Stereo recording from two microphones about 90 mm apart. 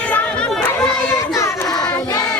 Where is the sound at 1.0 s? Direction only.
35° left (ahead or behind).